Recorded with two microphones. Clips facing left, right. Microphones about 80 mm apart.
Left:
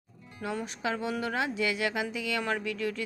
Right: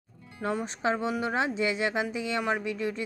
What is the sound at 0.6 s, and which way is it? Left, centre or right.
Speech, right.